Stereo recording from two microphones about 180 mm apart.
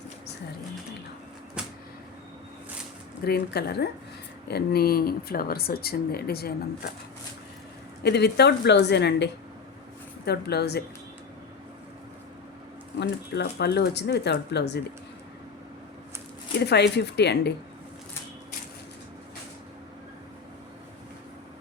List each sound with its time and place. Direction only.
1.6 s a sound: 5° right (ahead or behind)
3.2 s speech: 60° left (ahead or behind)
8.0 s speech: 70° left (ahead or behind)
13.0 s speech: 70° left (ahead or behind)
16.6 s speech: 70° left (ahead or behind)